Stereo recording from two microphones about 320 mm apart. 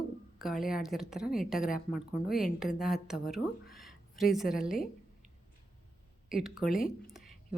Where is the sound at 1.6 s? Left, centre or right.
Left.